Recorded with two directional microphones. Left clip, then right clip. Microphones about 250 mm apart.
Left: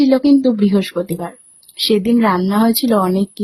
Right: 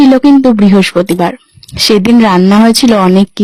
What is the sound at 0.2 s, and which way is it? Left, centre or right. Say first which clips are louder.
Speech: right 7 dB; right.